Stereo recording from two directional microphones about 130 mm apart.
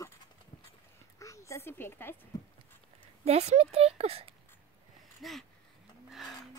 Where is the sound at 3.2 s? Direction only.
55° right (ahead or behind).